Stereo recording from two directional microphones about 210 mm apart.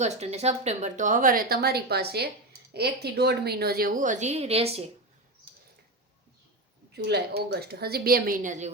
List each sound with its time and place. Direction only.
0.0 s a woman's voice: 30° right (ahead or behind)
6.9 s a woman's voice: 50° right (ahead or behind); by 8.7 s 35° right (ahead or behind)